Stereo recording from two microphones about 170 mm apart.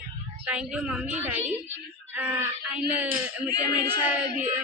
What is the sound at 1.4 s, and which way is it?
Speech, 40° right (ahead or behind).